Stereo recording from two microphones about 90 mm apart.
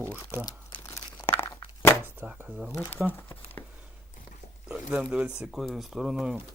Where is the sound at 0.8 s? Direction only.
40° left (ahead or behind).